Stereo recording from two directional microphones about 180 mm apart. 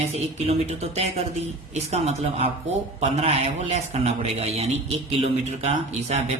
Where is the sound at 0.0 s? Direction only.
35° right (ahead or behind).